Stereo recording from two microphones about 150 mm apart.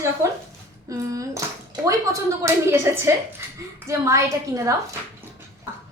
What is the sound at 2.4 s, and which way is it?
A woman's voice, 15° right (ahead or behind).